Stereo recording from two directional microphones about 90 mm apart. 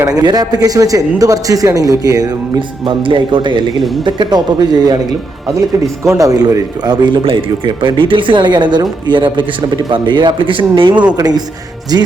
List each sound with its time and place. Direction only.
0.2 s speech: 50° right (ahead or behind)
2.6 s speech: 70° right (ahead or behind); by 4.9 s 50° right (ahead or behind)
5.5 s speech: 35° right (ahead or behind)
6.8 s speech: 55° right (ahead or behind)
11.2 s speech: 45° right (ahead or behind)